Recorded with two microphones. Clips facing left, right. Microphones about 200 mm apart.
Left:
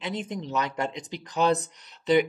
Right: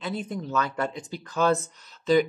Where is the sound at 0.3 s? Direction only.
15° left (ahead or behind).